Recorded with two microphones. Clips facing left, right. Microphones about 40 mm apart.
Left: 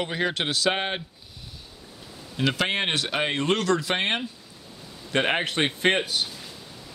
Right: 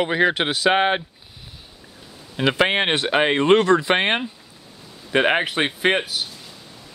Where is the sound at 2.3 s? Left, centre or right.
Right.